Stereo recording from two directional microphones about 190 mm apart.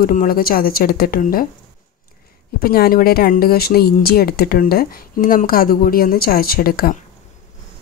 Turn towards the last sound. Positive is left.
turn(degrees=50)  # may be behind; listen again after turning